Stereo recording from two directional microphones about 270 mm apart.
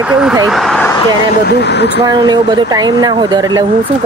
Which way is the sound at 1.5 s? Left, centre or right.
Left.